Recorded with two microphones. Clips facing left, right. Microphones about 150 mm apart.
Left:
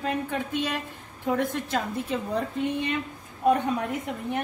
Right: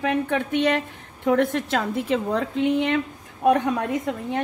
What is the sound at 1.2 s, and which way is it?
A woman's voice, 80° right.